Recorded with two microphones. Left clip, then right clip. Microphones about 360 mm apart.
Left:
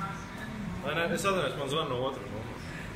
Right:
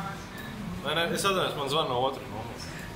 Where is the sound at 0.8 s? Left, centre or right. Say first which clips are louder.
Right 2 dB; centre.